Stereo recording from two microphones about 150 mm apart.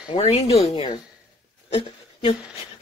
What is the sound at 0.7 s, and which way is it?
Speech, 30° left (ahead or behind).